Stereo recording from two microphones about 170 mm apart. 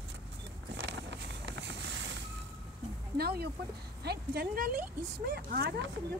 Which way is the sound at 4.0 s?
70° right (ahead or behind).